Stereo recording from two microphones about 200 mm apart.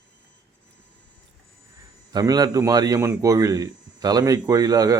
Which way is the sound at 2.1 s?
20° right (ahead or behind).